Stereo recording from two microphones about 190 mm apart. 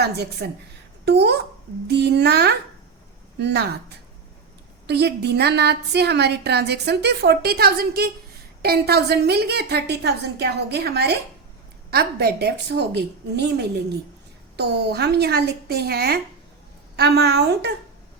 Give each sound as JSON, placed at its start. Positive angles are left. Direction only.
{"t": 0.0, "sound": "a woman's voice", "side_deg": -60}